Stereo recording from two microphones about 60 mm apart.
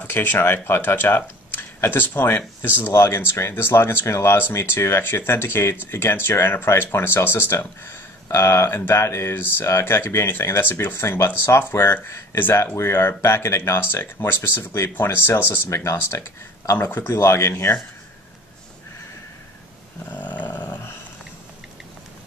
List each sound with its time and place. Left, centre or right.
0.0 s speech: left
9.3 s speech: left
15.7 s speech: left
16.8 s speech: left
17.1 s speech: left
20.1 s snoring: left